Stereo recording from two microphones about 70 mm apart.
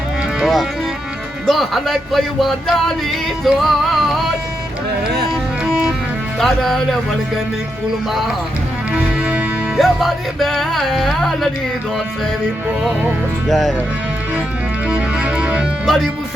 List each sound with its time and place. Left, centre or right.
0.3 s music: centre
1.5 s speech: centre
6.4 s speech: centre
9.2 s music: centre
9.7 s speech: centre
13.5 s speech: centre
14.8 s music: centre